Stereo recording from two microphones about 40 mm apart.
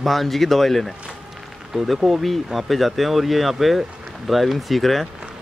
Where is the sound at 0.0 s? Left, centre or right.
Centre.